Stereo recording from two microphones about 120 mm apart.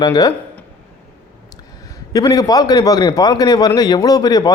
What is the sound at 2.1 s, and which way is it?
A man's voice, 30° left (ahead or behind).